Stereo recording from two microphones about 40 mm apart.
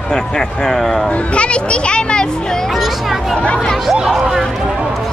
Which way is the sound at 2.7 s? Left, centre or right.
Centre.